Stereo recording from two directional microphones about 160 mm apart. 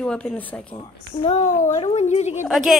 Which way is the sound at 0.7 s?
45° left (ahead or behind).